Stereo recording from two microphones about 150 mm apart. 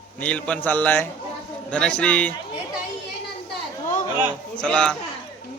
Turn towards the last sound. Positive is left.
turn(degrees=5)  # may be behind; listen again after turning